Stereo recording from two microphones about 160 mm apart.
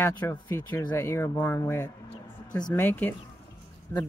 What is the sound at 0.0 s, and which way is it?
Speech, 15° left (ahead or behind).